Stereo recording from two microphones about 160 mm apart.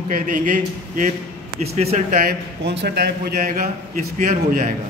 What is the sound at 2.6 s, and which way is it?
A man's voice, 90° right.